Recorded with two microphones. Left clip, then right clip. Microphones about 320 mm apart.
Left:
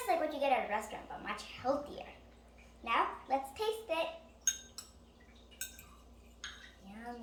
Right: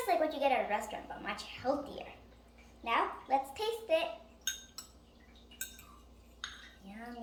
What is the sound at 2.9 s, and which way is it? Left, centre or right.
A child's voice, centre.